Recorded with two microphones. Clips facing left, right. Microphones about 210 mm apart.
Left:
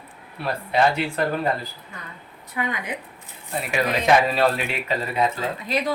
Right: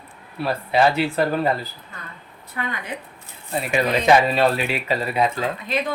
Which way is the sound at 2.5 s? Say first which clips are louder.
Left 2 dB; 15° left (ahead or behind).